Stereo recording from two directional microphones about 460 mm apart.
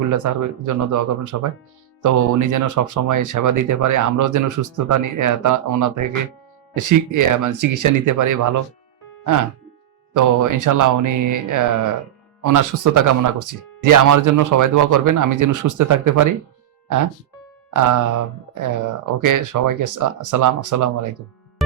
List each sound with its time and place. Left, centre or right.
0.1 s speech: right
10.1 s speech: right
17.7 s speech: right